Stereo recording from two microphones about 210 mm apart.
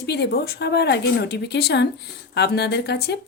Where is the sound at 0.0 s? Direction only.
50° left (ahead or behind).